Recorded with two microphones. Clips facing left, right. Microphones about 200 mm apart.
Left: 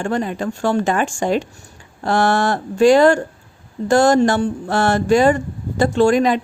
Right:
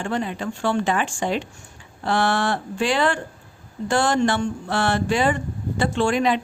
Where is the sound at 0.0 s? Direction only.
45° left (ahead or behind).